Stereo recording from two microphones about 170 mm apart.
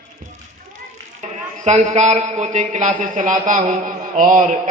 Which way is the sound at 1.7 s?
40° right (ahead or behind).